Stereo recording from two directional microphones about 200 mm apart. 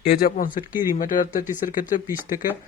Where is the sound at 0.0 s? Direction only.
50° left (ahead or behind).